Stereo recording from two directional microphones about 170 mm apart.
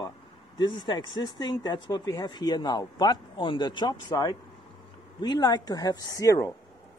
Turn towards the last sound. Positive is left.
turn(degrees=20)  # may be behind; listen again after turning